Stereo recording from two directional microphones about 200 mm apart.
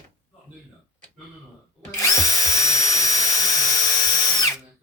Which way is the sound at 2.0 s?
15° left (ahead or behind).